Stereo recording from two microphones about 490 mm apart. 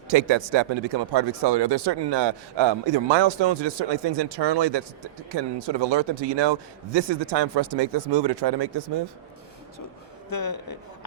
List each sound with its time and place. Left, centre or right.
0.1 s a man's voice: right
10.2 s a man's voice: left